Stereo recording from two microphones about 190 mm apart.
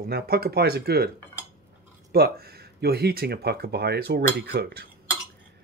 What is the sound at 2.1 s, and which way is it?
Speech, 55° right (ahead or behind).